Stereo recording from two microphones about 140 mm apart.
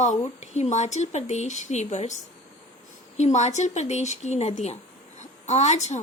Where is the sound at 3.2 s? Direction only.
55° left (ahead or behind).